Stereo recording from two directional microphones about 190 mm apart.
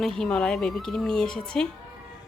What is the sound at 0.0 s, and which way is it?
Speech, centre (ahead or behind).